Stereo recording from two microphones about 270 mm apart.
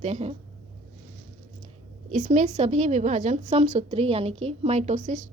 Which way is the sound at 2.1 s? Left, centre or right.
Right.